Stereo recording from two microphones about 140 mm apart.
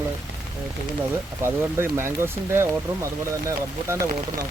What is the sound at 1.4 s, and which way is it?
Speech, 20° right (ahead or behind).